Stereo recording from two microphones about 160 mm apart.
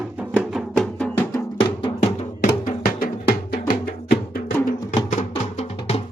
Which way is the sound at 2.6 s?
65° left (ahead or behind).